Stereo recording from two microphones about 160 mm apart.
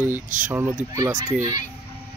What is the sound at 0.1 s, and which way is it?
Speech, 55° right (ahead or behind).